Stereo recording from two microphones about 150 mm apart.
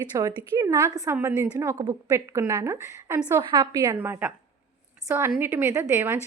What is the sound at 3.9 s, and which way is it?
A woman's voice, 15° right (ahead or behind).